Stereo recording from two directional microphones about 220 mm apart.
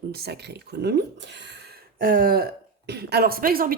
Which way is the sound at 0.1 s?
45° right (ahead or behind).